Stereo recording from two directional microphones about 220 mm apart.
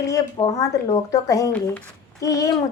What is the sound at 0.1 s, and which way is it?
A woman's voice, 15° left (ahead or behind).